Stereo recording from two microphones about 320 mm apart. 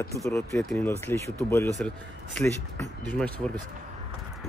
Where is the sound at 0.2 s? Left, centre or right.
Centre.